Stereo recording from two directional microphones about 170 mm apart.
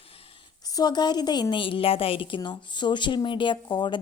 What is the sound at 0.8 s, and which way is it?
A woman's voice, 25° left (ahead or behind).